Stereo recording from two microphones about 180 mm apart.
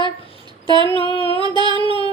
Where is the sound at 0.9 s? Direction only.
30° left (ahead or behind).